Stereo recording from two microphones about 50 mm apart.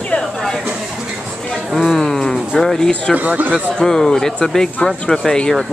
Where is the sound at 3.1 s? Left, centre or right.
Right.